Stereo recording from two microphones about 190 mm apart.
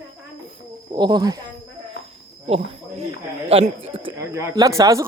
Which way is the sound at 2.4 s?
30° right (ahead or behind).